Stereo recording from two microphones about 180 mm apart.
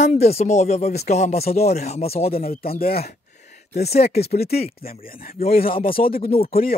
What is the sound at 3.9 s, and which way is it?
Speech, 35° left (ahead or behind).